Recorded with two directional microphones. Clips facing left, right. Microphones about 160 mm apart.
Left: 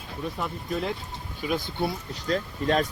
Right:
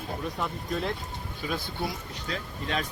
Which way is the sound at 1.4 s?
15° left (ahead or behind).